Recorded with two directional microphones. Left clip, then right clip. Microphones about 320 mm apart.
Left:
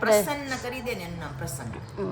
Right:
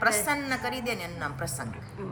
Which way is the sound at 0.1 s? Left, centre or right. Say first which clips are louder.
Left 6 dB; centre.